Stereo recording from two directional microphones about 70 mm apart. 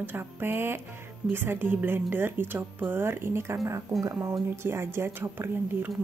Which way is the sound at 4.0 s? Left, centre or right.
Right.